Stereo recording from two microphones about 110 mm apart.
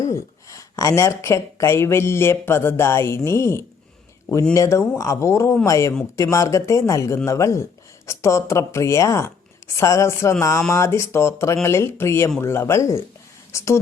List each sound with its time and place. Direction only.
0.0 s speech: 30° left (ahead or behind)